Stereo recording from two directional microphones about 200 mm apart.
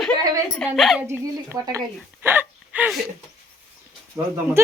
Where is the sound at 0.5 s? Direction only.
Centre (ahead or behind).